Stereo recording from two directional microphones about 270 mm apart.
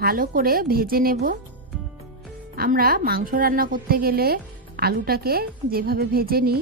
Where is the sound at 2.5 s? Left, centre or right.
Right.